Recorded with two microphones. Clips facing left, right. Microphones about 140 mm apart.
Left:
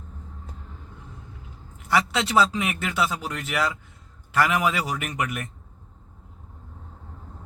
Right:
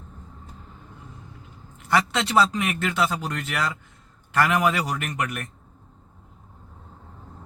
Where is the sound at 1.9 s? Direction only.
5° left (ahead or behind).